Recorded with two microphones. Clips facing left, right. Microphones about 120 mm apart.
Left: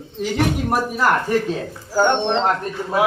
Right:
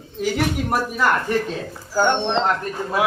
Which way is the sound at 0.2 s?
5° right (ahead or behind).